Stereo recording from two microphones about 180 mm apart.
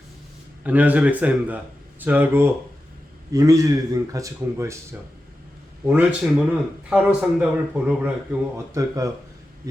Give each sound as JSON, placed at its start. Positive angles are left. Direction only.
{"t": 0.6, "sound": "a man's voice", "side_deg": -10}